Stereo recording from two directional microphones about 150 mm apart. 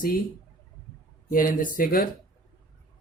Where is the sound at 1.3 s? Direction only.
65° left (ahead or behind).